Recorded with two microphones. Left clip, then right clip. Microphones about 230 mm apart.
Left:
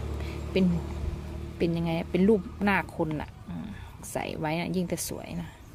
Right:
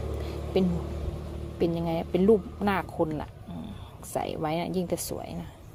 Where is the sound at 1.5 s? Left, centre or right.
Centre.